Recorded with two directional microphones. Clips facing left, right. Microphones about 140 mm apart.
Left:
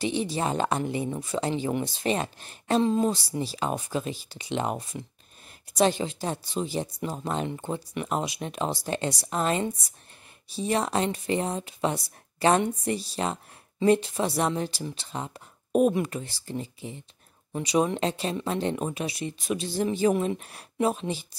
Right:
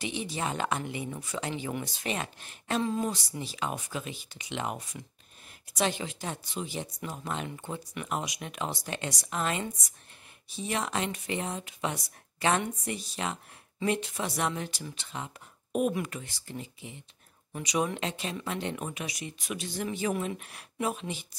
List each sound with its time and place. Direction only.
0.0 s speech: 35° left (ahead or behind)